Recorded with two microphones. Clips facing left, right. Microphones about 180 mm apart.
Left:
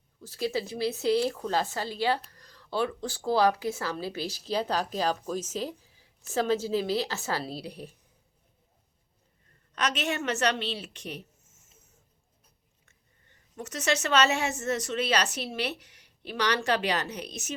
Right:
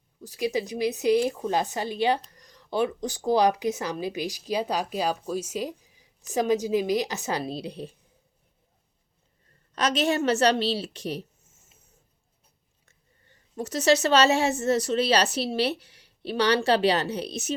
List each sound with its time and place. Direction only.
0.2 s speech: 15° right (ahead or behind)
9.7 s a woman's voice: 35° right (ahead or behind)
12.8 s a woman's voice: 35° right (ahead or behind)